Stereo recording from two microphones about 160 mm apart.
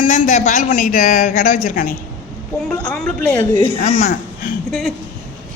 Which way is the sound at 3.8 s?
50° left (ahead or behind).